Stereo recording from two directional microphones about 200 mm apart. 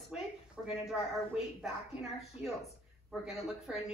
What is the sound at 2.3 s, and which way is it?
Speech, 30° left (ahead or behind).